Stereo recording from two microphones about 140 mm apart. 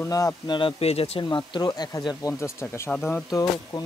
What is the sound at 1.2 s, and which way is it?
Speech, 35° left (ahead or behind).